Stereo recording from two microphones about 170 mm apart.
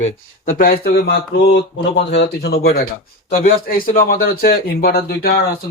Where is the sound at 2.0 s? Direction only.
90° left; by 2.8 s 70° left (ahead or behind).